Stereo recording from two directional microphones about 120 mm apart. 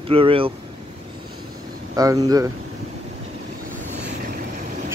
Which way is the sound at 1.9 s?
30° right (ahead or behind).